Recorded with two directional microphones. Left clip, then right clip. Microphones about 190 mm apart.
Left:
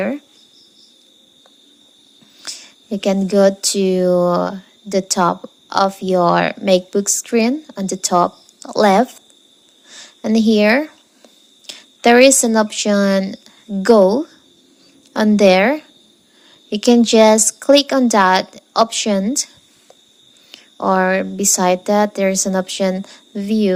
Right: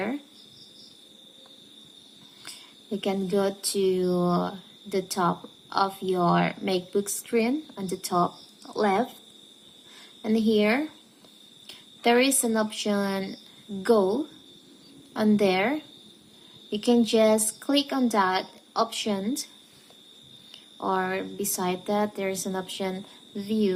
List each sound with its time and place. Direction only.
2.9 s speech: 40° left (ahead or behind)
10.2 s a woman's voice: 45° left (ahead or behind)
20.5 s a woman's voice: 40° left (ahead or behind)